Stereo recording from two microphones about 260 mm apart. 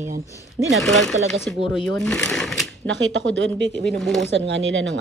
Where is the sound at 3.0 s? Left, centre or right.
Right.